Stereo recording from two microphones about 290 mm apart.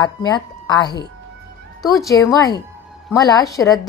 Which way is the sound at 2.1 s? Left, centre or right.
Centre.